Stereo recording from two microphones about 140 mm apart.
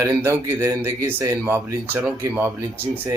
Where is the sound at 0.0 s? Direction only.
15° right (ahead or behind).